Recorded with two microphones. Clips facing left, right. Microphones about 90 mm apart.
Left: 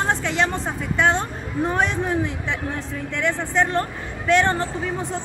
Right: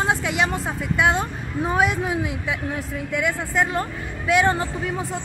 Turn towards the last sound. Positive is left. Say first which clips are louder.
# even
turn(degrees=0)  # may be behind; listen again after turning